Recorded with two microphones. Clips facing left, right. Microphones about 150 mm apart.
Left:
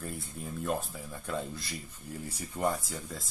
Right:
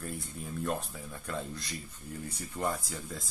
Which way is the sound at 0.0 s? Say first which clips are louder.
Even; centre (ahead or behind).